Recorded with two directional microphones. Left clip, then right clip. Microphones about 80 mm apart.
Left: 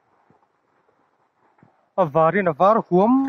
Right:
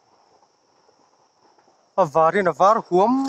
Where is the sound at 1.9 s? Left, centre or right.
Centre.